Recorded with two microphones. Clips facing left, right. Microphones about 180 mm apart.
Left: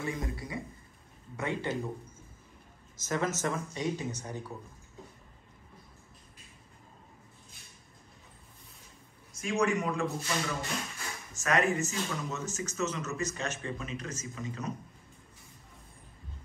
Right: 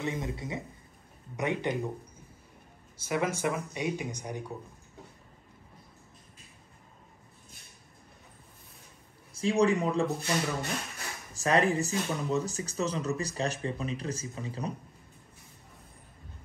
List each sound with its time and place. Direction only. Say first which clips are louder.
0.0 s speech: right 2 dB; 20° right (ahead or behind)
3.1 s speech: right 2 dB; 10° right (ahead or behind)
9.3 s speech: right 4 dB; 35° right (ahead or behind)
11.3 s speech: right 3 dB; 30° right (ahead or behind)